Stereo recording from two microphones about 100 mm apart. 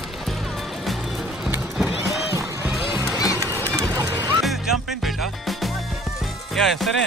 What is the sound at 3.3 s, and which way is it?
Run, 35° right (ahead or behind).